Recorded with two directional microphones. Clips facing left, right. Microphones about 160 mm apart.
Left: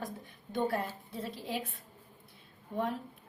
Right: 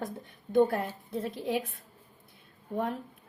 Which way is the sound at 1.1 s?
50° right (ahead or behind).